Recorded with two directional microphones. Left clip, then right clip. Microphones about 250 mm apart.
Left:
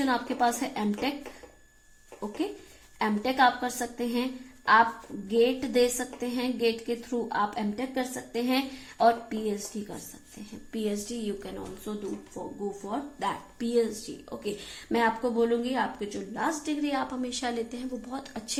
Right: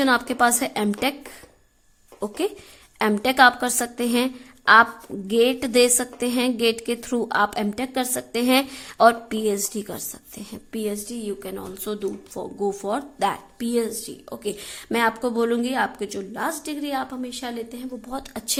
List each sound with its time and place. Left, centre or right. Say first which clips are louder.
0.0 s a woman's voice: right 7 dB; right
3.0 s a woman's voice: right 8 dB; right
12.4 s speech: right 11 dB; right; by 18.2 s centre
18.2 s speech: right 7 dB; right